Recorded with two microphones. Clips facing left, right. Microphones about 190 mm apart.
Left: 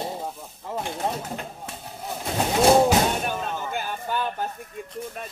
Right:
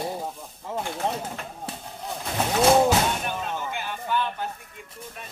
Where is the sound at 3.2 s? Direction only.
40° left (ahead or behind).